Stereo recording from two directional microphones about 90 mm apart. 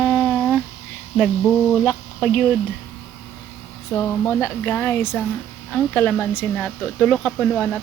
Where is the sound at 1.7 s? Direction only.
Centre (ahead or behind).